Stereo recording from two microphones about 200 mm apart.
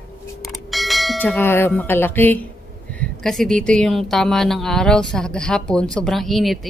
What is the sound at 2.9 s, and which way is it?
A woman's voice, 5° left (ahead or behind).